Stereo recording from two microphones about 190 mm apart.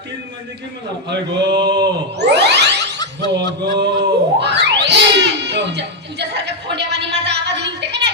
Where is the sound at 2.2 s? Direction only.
65° right (ahead or behind).